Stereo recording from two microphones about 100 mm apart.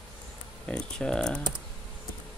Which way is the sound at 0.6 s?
10° left (ahead or behind).